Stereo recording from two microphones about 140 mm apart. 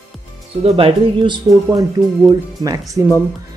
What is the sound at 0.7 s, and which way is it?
Speech, 40° right (ahead or behind).